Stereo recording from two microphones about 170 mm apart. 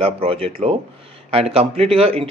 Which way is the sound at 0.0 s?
35° right (ahead or behind).